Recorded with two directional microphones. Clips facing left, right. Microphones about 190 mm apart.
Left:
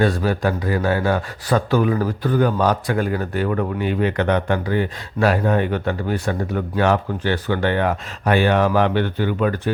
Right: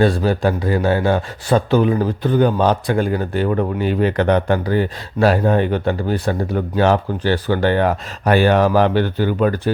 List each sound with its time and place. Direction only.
0.0 s speech: 30° right (ahead or behind)